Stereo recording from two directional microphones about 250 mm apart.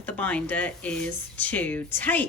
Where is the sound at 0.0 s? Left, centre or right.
Centre.